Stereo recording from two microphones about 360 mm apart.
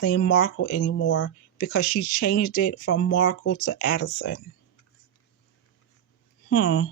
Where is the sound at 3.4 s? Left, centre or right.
Left.